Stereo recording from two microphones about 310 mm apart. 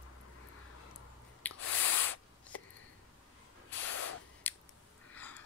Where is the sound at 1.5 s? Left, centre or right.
Left.